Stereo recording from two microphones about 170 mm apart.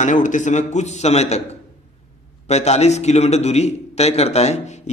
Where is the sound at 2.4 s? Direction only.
40° left (ahead or behind).